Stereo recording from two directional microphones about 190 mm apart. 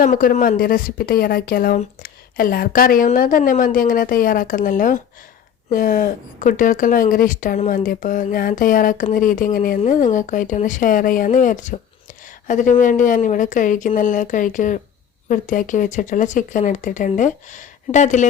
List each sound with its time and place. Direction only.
0.0 s a woman's voice: 45° left (ahead or behind)